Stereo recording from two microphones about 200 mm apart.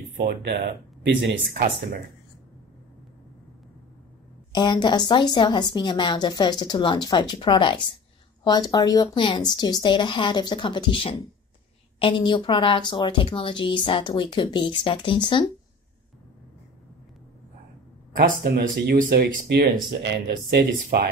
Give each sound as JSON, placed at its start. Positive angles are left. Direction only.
{"t": 0.3, "sound": "speech", "side_deg": -55}
{"t": 4.5, "sound": "speech", "side_deg": 20}
{"t": 18.1, "sound": "speech", "side_deg": -45}